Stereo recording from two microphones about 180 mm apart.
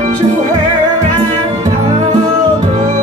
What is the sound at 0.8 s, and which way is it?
Music, 20° right (ahead or behind).